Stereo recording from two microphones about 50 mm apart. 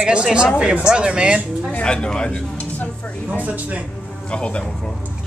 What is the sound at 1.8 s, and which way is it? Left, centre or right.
Speech, centre.